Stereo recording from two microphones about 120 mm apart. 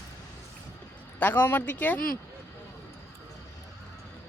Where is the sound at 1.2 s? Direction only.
15° left (ahead or behind).